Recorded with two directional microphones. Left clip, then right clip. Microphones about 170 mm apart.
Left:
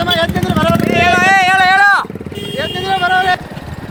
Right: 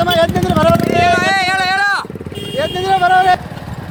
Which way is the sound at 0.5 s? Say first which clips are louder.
Right 2 dB; 45° right (ahead or behind).